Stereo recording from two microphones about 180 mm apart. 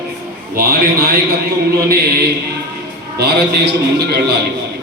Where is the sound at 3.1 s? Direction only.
65° right (ahead or behind).